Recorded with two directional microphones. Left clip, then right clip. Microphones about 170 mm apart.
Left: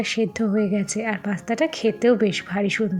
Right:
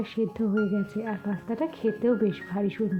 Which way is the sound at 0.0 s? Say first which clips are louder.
Left 6 dB; 10° left (ahead or behind).